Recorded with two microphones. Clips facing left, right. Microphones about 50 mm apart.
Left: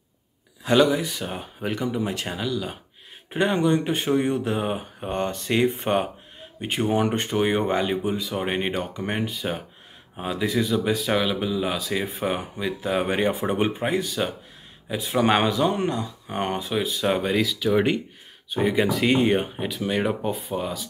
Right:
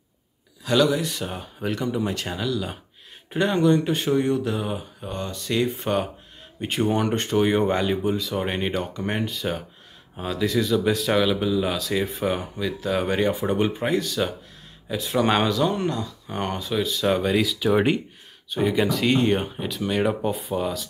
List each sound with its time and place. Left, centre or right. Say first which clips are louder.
0.7 s speech: left 1 dB; left
1.0 s speech: right 1 dB; centre
3.3 s speech: even; centre
3.5 s speech: right 4 dB; centre
3.8 s speech: right 1 dB; left
6.6 s speech: even; centre
10.5 s speech: right 2 dB; centre
12.5 s speech: even; left
17.4 s speech: right 1 dB; centre
18.5 s speech: even; centre